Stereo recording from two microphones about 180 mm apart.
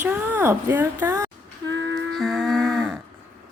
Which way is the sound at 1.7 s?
85° right.